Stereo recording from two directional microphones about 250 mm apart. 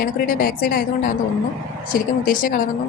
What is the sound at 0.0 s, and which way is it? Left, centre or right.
Speech, left.